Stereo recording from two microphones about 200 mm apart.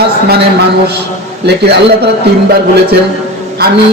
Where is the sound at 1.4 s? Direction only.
55° right (ahead or behind).